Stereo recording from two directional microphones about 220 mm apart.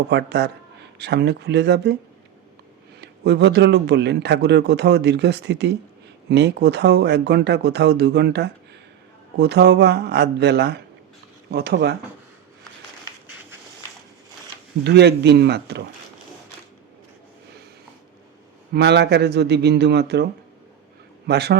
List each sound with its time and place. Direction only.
0.1 s a man's voice: 50° right (ahead or behind)
3.0 s a man's voice: 50° right (ahead or behind)
14.8 s a man's voice: 50° right (ahead or behind)
18.7 s a man's voice: 50° right (ahead or behind)
21.2 s a man's voice: 50° right (ahead or behind)